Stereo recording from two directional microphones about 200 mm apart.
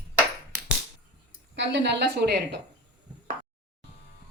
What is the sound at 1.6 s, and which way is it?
Speech, 60° right (ahead or behind).